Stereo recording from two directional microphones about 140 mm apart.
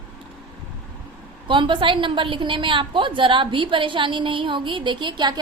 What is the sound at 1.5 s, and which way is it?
A woman's voice, 35° right (ahead or behind).